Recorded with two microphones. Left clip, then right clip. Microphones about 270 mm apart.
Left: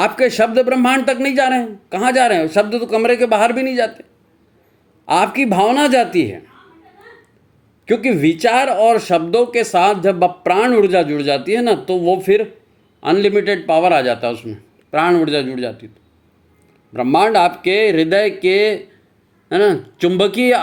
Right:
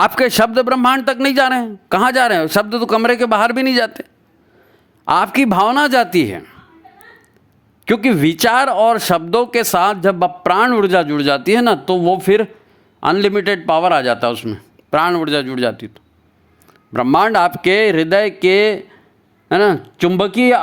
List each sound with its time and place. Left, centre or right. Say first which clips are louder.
0.0 s speech: right 1 dB; right
5.0 s speech: right 1 dB; right
7.9 s speech: even; right
16.9 s speech: even; right